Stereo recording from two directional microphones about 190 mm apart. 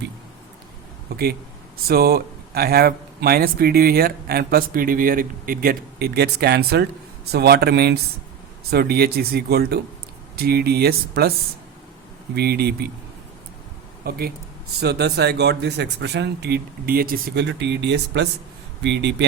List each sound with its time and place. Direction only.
1.1 s speech: 55° right (ahead or behind)
12.3 s speech: 55° right (ahead or behind)
14.0 s speech: 55° right (ahead or behind)